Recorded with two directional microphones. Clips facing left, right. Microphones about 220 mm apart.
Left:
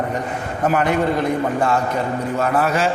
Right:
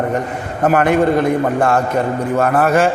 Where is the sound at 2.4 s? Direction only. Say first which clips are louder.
Right 6 dB; 55° right (ahead or behind).